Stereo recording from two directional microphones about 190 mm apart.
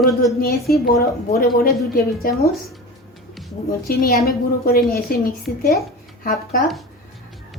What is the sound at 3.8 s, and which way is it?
A woman's voice, 55° left (ahead or behind).